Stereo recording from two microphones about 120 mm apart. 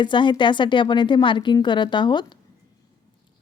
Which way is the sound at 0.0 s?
40° left (ahead or behind).